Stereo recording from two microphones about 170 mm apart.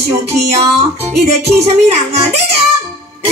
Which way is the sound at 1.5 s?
40° right (ahead or behind).